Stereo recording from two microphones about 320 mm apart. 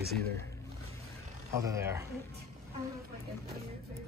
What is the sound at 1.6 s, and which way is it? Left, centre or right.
Speech, centre.